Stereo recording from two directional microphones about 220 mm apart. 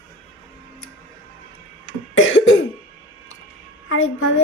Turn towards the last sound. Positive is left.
turn(degrees=65)  # may be behind; listen again after turning